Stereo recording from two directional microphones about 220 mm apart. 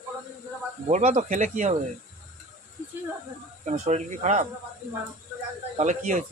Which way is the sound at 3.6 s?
30° right (ahead or behind).